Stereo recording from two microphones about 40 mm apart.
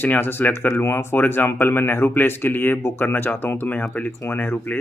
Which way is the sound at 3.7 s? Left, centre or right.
Left.